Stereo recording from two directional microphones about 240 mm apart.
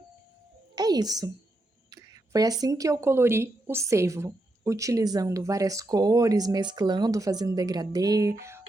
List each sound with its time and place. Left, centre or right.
0.8 s a woman's voice: centre